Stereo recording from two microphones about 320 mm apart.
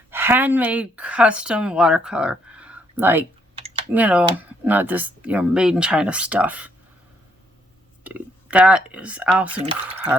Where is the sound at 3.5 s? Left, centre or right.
Centre.